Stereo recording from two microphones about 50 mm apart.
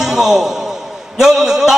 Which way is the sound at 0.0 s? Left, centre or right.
Centre.